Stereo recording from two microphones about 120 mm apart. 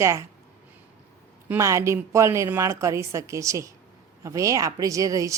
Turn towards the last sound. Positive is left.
turn(degrees=-30)  # may be behind; listen again after turning